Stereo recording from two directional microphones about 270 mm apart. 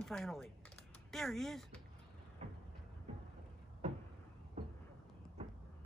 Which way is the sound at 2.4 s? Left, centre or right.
Right.